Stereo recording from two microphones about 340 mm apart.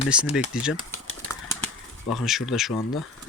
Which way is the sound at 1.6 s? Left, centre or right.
Centre.